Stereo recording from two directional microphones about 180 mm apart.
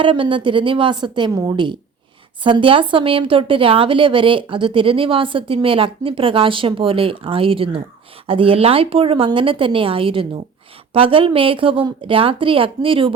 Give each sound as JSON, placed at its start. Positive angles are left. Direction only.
{"t": 0.0, "sound": "speech", "side_deg": -30}